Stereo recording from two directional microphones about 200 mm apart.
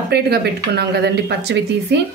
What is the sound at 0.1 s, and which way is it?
Speech, 55° right (ahead or behind).